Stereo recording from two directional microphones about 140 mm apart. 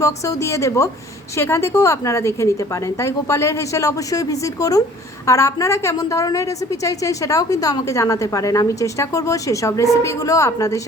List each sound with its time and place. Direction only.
0.0 s a woman's voice: 20° left (ahead or behind)